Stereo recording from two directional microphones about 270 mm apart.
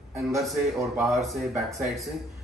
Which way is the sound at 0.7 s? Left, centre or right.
Centre.